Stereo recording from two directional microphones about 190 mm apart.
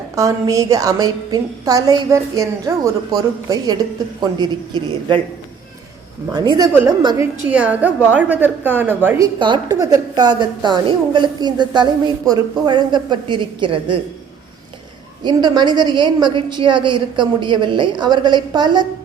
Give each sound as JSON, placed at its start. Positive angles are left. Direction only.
{"t": 0.2, "sound": "a woman's voice", "side_deg": -15}
{"t": 6.3, "sound": "a woman's voice", "side_deg": -20}
{"t": 7.4, "sound": "a man's voice", "side_deg": -5}
{"t": 15.2, "sound": "a woman's voice", "side_deg": -20}